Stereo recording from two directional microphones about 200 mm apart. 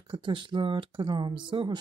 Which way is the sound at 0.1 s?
25° right (ahead or behind).